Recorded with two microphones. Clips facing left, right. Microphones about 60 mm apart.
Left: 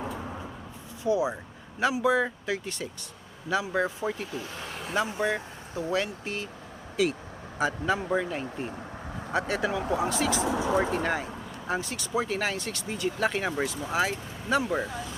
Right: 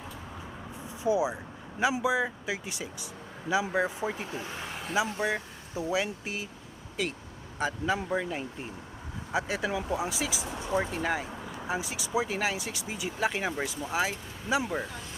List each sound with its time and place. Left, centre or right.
1.0 s speech: centre
4.3 s speech: right
4.6 s vehicle: centre
5.2 s speech: centre